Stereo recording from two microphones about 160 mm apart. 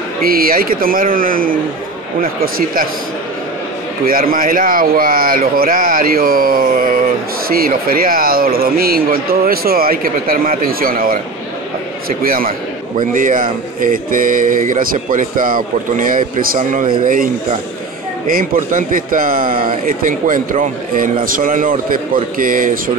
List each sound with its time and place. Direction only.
0.2 s speech: 65° right (ahead or behind)
4.0 s speech: 65° right (ahead or behind)
12.2 s speech: 65° right (ahead or behind)